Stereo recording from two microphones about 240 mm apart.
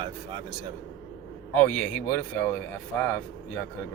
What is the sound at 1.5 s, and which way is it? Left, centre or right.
Speech, centre.